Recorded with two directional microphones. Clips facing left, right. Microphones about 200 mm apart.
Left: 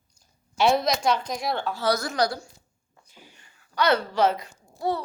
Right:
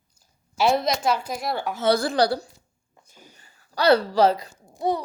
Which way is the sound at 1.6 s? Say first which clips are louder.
Right 7 dB; 20° right (ahead or behind).